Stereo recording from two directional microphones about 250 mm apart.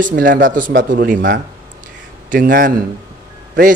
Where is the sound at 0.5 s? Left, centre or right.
Right.